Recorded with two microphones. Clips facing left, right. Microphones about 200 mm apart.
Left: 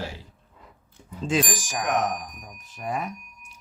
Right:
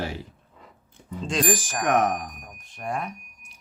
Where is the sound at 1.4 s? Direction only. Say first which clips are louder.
Right 5 dB; 60° right (ahead or behind).